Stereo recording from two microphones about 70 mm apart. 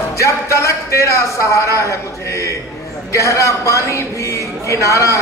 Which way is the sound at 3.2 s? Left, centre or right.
Left.